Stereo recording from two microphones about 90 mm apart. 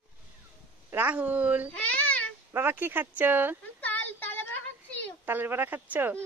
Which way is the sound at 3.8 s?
20° left (ahead or behind).